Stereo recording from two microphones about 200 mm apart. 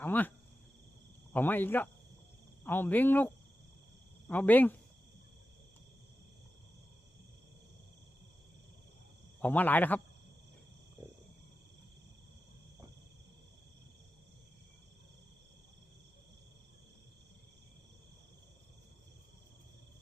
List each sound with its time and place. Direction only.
0.0 s cricket: 10° left (ahead or behind)
1.3 s speech: 10° left (ahead or behind)
9.4 s speech: 10° left (ahead or behind)